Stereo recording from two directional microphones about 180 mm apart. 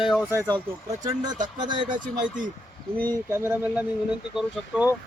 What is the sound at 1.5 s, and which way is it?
Speech, 25° right (ahead or behind).